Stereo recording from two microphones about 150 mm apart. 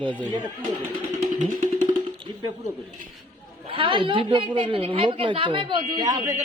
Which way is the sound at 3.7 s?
35° right (ahead or behind).